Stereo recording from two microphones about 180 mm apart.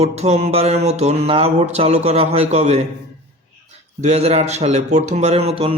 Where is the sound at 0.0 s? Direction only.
35° right (ahead or behind).